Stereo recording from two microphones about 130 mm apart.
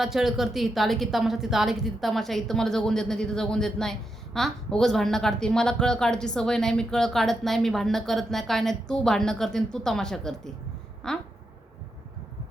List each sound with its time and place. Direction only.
0.0 s a woman's voice: centre (ahead or behind)